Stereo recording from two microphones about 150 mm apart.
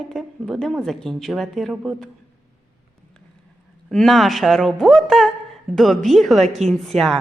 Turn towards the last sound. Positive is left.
turn(degrees=0)  # may be behind; listen again after turning